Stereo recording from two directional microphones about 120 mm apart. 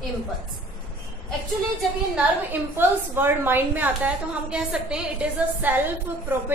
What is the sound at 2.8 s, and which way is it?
A woman's voice, 15° right (ahead or behind).